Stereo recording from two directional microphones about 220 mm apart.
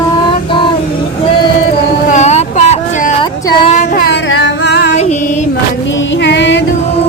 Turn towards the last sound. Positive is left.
turn(degrees=50)  # may be behind; listen again after turning